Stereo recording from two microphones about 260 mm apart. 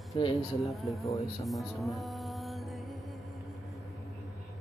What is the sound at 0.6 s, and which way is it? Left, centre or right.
Speech, centre.